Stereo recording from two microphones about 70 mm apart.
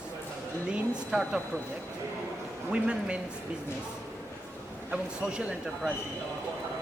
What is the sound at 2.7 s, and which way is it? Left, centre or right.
Speech, centre.